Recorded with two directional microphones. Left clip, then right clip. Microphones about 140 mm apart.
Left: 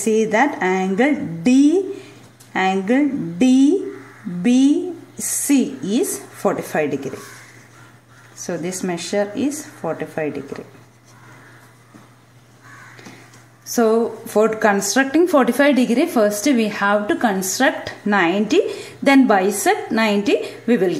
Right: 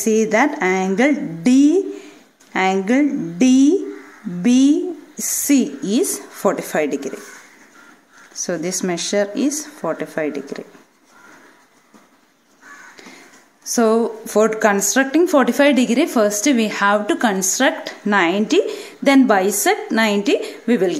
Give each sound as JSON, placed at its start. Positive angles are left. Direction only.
{"t": 0.0, "sound": "a woman's voice", "side_deg": -25}
{"t": 8.5, "sound": "speech", "side_deg": -35}
{"t": 13.7, "sound": "a woman's voice", "side_deg": -30}